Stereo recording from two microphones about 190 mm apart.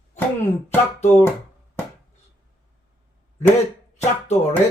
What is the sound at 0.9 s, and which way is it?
Speech, 35° left (ahead or behind).